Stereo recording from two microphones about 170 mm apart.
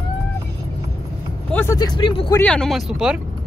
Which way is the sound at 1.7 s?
25° left (ahead or behind).